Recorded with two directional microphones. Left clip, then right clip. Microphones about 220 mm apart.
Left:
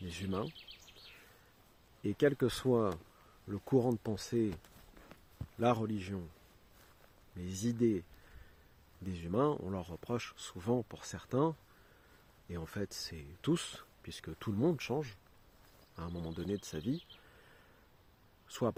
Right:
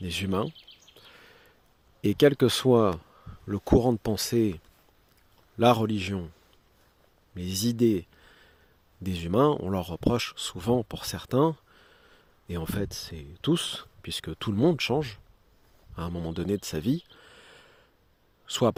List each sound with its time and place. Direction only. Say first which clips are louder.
0.1 s speech: right 11 dB; 40° right (ahead or behind)
2.0 s speech: right 10 dB; 45° right (ahead or behind)
5.5 s speech: right 11 dB; 45° right (ahead or behind)
7.3 s speech: right 9 dB; 40° right (ahead or behind)
9.0 s speech: right 10 dB; 40° right (ahead or behind)
18.4 s speech: right 11 dB; 40° right (ahead or behind)